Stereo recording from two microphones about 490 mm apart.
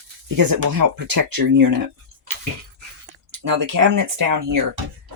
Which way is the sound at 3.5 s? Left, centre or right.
Right.